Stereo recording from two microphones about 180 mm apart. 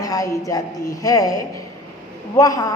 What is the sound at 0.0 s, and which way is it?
A woman's voice, 20° left (ahead or behind).